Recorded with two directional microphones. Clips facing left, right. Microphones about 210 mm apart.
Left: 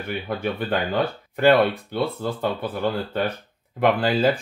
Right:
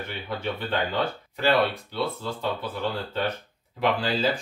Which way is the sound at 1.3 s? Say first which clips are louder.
Left 6 dB; 55° left (ahead or behind).